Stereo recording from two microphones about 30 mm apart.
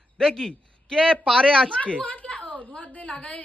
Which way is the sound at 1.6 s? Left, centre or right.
Left.